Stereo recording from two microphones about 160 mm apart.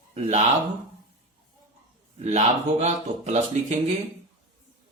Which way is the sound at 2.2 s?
45° right (ahead or behind).